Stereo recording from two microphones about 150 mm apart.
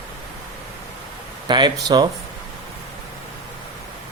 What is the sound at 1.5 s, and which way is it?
Speech, 30° right (ahead or behind).